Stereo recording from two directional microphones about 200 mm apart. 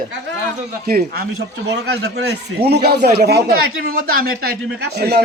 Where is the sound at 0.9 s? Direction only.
50° right (ahead or behind).